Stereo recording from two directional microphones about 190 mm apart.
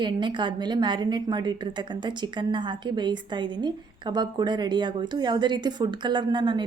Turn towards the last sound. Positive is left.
turn(degrees=-25)  # may be behind; listen again after turning